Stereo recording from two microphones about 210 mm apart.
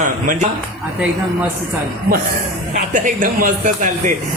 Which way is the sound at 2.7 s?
40° right (ahead or behind).